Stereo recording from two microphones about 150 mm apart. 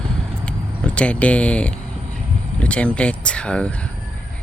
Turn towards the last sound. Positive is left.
turn(degrees=5)  # may be behind; listen again after turning